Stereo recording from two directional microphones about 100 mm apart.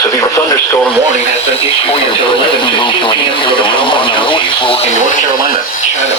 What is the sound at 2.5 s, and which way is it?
Speech, 55° left (ahead or behind).